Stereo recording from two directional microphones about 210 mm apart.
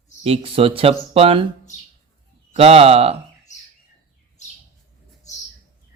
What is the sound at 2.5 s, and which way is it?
Speech, 30° right (ahead or behind).